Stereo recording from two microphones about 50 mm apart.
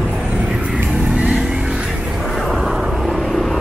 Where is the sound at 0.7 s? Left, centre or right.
Right.